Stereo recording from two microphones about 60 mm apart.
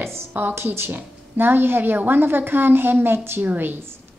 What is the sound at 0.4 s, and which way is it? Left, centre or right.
A woman's voice, right.